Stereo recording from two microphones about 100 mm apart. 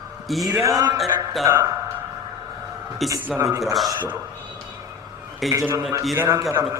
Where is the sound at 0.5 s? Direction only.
35° right (ahead or behind).